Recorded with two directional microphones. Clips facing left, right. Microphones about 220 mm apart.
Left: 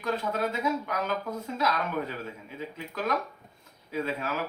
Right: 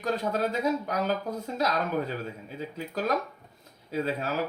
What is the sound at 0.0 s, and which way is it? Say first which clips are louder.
Speech: right 2 dB; 35° right (ahead or behind).